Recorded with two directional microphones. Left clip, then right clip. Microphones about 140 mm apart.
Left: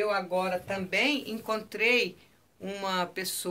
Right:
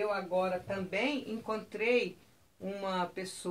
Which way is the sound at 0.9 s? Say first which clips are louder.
Left 7 dB; centre (ahead or behind).